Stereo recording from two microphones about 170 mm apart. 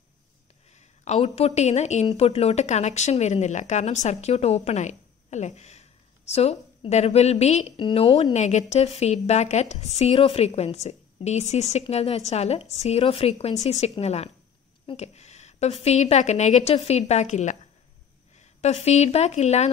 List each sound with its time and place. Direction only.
0.7 s a woman's voice: 40° left (ahead or behind)
14.9 s a sound: 40° left (ahead or behind)
15.8 s a woman's voice: 40° left (ahead or behind)